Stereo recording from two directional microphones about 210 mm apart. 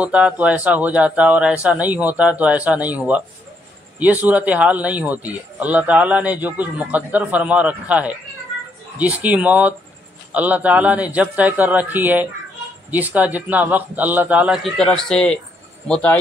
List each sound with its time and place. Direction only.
0.0 s a man's voice: 5° right (ahead or behind)